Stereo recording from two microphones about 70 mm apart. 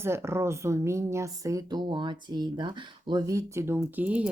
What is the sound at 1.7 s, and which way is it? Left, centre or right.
Speech, right.